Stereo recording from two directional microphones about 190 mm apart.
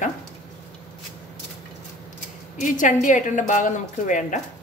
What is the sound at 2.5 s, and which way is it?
A woman's voice, 40° left (ahead or behind).